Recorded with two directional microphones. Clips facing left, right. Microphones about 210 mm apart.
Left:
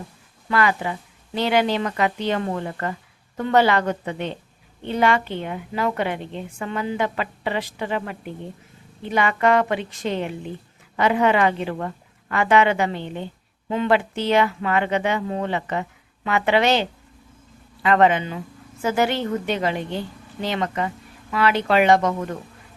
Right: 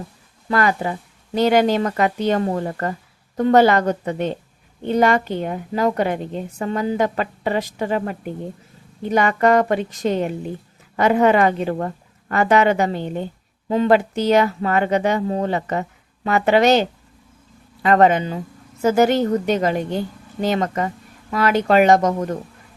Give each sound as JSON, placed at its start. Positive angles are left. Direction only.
{"t": 0.4, "sound": "a woman's voice", "side_deg": -40}